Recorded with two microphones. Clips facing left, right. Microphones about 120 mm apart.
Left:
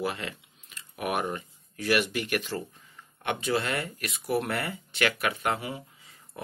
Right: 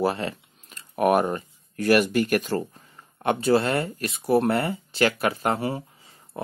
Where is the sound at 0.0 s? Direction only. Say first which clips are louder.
Right 7 dB; 35° right (ahead or behind).